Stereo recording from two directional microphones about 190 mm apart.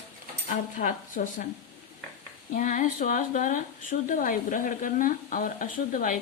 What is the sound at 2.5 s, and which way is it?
Speech, 45° left (ahead or behind).